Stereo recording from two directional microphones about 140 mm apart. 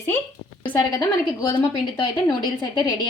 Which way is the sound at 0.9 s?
25° left (ahead or behind).